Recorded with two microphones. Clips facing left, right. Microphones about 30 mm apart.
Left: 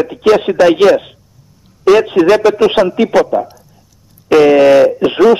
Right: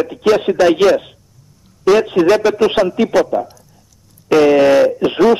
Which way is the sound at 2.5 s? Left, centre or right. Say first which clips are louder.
Left 3 dB; centre.